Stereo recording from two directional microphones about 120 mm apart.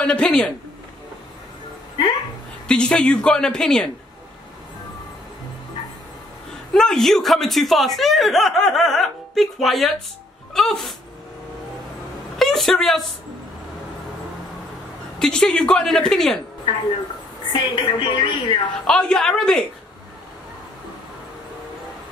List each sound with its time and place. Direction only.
0.0 s speech: 5° left (ahead or behind)
2.7 s speech: 10° left (ahead or behind)
6.7 s speech: 5° left (ahead or behind)
12.4 s a woman's voice: centre (ahead or behind)
15.1 s speech: 5° left (ahead or behind)
17.5 s a woman's voice: 45° left (ahead or behind)
18.9 s speech: 5° left (ahead or behind)